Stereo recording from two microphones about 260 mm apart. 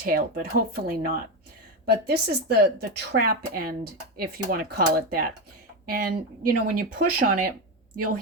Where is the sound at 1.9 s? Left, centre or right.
Right.